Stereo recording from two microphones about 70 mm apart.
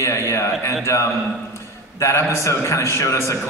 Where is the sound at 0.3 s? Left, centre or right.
Left.